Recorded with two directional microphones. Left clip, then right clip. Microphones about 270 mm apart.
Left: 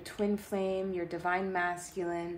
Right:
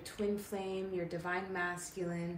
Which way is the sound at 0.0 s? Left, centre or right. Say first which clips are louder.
Left 4 dB; left.